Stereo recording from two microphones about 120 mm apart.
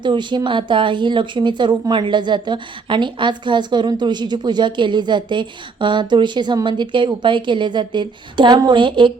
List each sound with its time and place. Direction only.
0.0 s a woman's voice: 40° right (ahead or behind)